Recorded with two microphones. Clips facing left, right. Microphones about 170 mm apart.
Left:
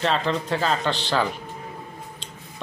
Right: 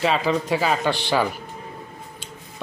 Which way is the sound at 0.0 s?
5° right (ahead or behind).